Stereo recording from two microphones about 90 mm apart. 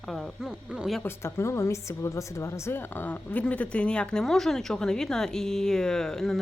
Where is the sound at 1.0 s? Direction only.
25° left (ahead or behind).